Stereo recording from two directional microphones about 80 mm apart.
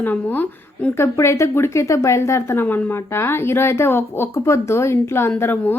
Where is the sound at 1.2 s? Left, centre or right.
Left.